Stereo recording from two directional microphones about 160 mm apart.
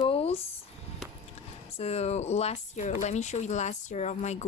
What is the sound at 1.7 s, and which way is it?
Speech, 40° left (ahead or behind).